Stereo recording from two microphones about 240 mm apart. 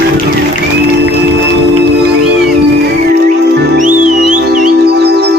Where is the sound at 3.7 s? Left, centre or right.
Right.